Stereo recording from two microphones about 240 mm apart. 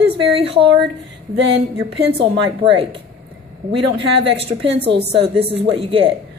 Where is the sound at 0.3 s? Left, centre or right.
Right.